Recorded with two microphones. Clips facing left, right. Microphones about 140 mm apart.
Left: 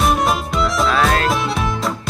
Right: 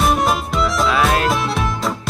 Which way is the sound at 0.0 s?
Centre (ahead or behind).